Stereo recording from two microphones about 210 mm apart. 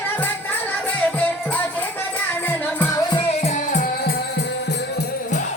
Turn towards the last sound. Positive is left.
turn(degrees=50)  # may be behind; listen again after turning